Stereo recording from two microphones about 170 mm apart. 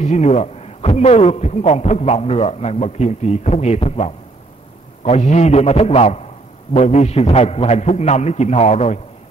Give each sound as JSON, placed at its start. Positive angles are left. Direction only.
{"t": 0.0, "sound": "a man's voice", "side_deg": 40}